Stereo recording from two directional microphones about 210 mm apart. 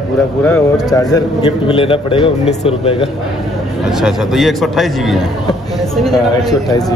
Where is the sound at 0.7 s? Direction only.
15° left (ahead or behind).